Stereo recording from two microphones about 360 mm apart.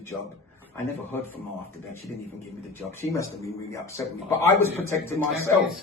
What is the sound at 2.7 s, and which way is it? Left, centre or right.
A man's voice, centre.